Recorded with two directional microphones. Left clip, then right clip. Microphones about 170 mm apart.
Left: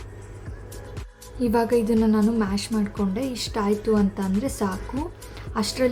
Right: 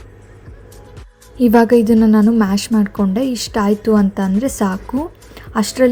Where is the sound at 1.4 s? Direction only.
40° right (ahead or behind).